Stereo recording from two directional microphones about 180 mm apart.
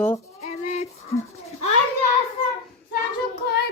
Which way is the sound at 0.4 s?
40° left (ahead or behind).